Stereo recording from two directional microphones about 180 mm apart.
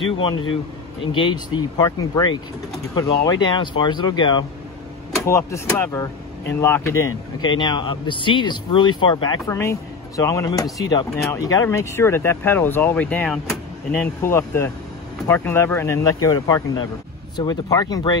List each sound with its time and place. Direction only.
0.0 s a man's voice: 30° left (ahead or behind)